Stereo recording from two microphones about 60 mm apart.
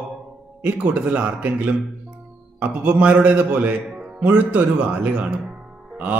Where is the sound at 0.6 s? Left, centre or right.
Right.